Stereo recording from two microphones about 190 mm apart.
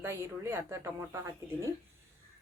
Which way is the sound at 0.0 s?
15° right (ahead or behind).